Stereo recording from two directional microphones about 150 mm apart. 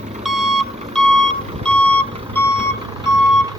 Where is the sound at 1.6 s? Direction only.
10° left (ahead or behind).